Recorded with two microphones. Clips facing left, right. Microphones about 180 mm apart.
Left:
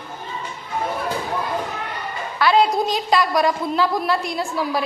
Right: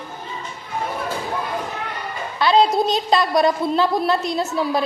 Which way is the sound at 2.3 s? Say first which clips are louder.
Right 1 dB; 20° right (ahead or behind).